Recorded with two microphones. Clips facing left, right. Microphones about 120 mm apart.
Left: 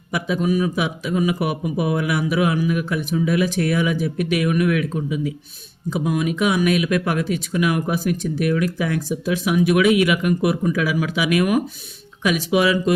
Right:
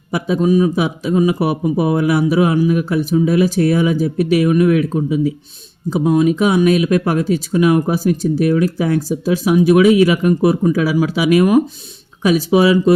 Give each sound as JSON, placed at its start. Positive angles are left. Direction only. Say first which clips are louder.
{"t": 0.1, "sound": "speech", "louder": "right 6 dB", "side_deg": -35}